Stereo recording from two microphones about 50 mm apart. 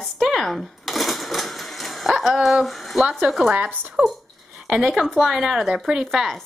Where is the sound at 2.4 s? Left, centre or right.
Centre.